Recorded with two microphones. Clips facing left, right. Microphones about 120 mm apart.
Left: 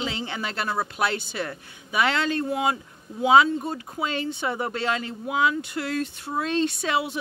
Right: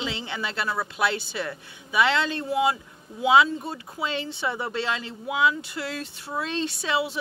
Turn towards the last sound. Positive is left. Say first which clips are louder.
# left 1 dB
turn(degrees=50)  # may be behind; listen again after turning